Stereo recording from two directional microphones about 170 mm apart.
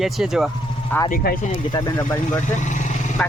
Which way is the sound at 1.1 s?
55° left (ahead or behind).